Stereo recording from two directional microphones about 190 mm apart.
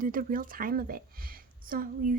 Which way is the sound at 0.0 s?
45° right (ahead or behind).